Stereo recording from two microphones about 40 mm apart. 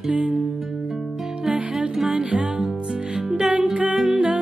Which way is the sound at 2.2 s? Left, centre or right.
Right.